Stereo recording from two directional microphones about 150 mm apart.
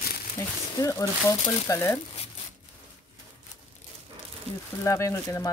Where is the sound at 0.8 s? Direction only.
20° left (ahead or behind).